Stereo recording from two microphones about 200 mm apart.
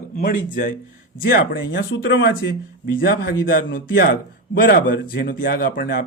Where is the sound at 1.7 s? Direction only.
60° left (ahead or behind).